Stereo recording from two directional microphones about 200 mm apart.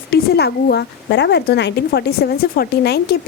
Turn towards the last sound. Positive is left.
turn(degrees=55)  # may be behind; listen again after turning